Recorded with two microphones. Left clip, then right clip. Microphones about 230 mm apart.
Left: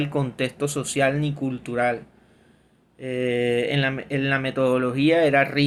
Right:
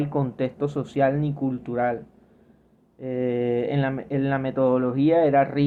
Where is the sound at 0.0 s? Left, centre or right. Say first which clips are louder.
Even; left.